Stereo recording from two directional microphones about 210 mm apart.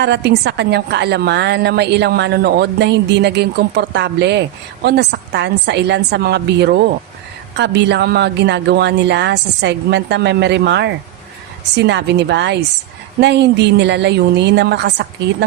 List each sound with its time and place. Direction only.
0.0 s a woman's voice: 55° right (ahead or behind)